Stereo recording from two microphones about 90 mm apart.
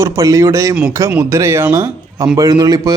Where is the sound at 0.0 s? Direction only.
35° right (ahead or behind).